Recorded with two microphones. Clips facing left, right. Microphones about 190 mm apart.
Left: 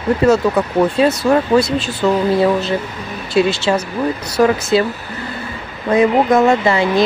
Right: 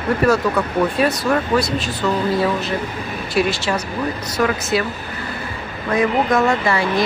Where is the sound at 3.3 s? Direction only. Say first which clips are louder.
Left 5 dB; 25° left (ahead or behind).